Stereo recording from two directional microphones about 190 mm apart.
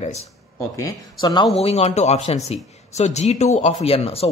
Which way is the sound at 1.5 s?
35° left (ahead or behind).